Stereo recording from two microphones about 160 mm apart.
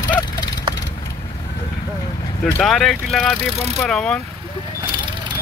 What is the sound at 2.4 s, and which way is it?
Speech, centre (ahead or behind).